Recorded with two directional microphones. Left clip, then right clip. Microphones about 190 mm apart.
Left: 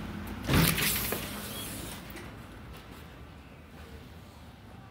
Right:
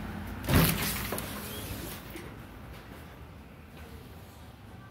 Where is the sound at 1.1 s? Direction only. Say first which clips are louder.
Left 1 dB; 40° left (ahead or behind).